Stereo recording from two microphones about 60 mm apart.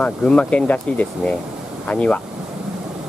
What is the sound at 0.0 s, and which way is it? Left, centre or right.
Speech, centre.